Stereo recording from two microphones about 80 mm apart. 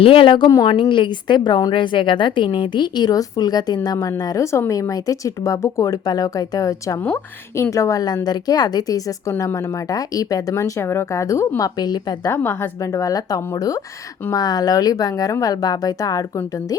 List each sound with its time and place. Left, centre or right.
0.1 s a woman's voice: left
1.7 s a woman's voice: left
10.5 s speech: left
11.8 s a woman's voice: left
12.3 s speech: left